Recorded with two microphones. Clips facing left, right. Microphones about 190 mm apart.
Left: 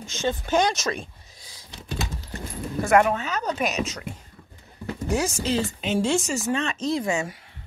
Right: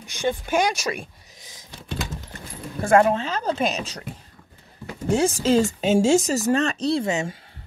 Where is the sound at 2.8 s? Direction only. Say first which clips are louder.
Right 2 dB; 30° right (ahead or behind).